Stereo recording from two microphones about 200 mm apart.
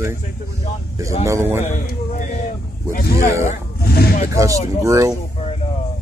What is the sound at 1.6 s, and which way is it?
Speech, 40° left (ahead or behind).